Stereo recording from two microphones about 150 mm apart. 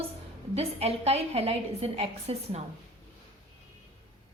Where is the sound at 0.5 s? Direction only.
45° right (ahead or behind).